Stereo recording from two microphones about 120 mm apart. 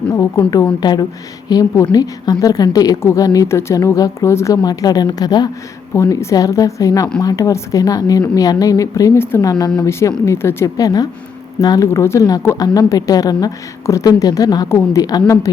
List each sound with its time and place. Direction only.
0.1 s a woman's voice: 30° left (ahead or behind)
9.5 s a woman's voice: 35° left (ahead or behind)